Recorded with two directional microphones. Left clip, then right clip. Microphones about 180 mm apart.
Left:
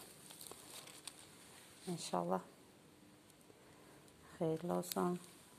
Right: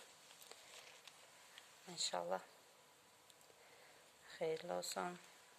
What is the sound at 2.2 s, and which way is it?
Speech, 15° right (ahead or behind).